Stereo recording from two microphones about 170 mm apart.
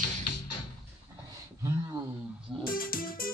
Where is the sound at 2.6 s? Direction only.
55° left (ahead or behind).